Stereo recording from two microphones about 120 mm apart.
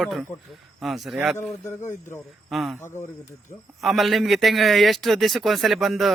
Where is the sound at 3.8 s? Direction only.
Centre (ahead or behind).